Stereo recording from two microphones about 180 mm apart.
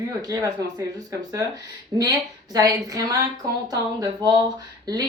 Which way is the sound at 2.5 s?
20° right (ahead or behind).